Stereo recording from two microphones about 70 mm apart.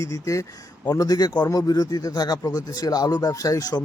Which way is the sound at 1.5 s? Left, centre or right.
Left.